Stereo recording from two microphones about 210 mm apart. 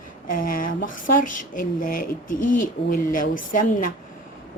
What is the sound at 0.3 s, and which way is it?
Speech, 40° left (ahead or behind).